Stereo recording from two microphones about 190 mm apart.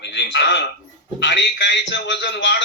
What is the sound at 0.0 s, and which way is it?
A man's voice, 65° left (ahead or behind).